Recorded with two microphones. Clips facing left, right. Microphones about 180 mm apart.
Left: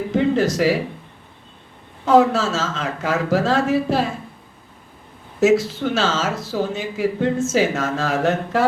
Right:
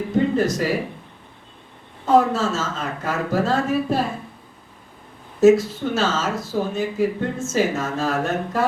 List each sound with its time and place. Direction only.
0.1 s a sound: 85° left
2.0 s speech: 90° left
5.4 s speech: 90° left